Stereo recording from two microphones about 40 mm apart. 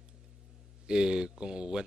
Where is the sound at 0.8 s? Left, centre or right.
Right.